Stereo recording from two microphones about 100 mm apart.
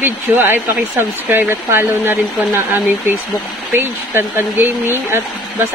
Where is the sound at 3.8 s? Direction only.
25° right (ahead or behind).